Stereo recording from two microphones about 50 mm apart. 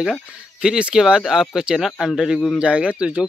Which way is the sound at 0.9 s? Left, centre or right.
Centre.